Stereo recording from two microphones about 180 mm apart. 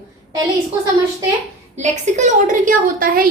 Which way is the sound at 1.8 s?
40° right (ahead or behind).